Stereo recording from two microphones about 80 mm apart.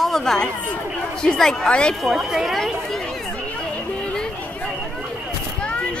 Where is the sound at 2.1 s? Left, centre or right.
Centre.